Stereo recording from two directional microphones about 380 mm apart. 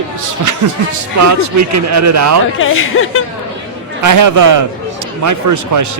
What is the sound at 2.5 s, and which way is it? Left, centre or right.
Speech, left.